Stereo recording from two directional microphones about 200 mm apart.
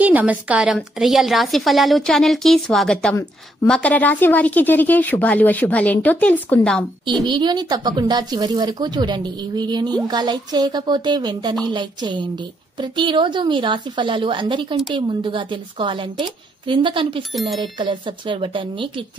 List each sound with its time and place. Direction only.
0.0 s a woman's voice: 10° right (ahead or behind)
7.2 s a woman's voice: 20° right (ahead or behind)
17.3 s a woman's voice: centre (ahead or behind)
17.6 s a woman's voice: 25° right (ahead or behind)